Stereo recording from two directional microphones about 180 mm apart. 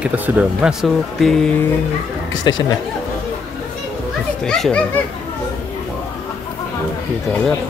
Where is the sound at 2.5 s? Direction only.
25° left (ahead or behind).